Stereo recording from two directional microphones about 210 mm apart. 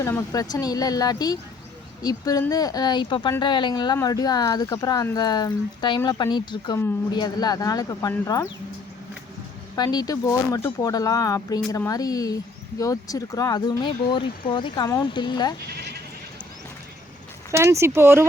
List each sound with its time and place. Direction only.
0.0 s speech: 15° left (ahead or behind)
9.7 s speech: 20° left (ahead or behind)
15.7 s bleat: 50° right (ahead or behind)
17.5 s speech: 15° right (ahead or behind)